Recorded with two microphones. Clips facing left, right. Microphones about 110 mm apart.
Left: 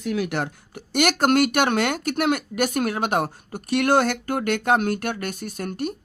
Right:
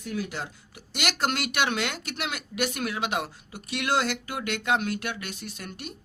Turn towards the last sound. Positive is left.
turn(degrees=45)  # may be behind; listen again after turning